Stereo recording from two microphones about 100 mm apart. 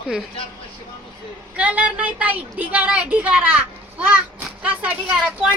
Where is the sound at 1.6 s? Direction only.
15° right (ahead or behind).